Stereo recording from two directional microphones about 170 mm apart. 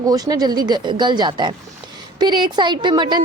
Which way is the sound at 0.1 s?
20° right (ahead or behind).